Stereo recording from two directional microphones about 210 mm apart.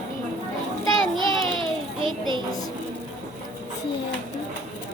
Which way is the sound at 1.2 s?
25° right (ahead or behind).